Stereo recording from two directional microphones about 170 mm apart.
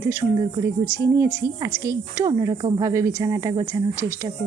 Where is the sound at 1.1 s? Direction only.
20° right (ahead or behind).